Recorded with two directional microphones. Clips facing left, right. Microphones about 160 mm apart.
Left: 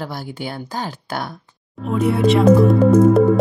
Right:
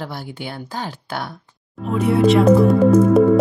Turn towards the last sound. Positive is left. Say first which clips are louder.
# even
turn(degrees=0)  # may be behind; listen again after turning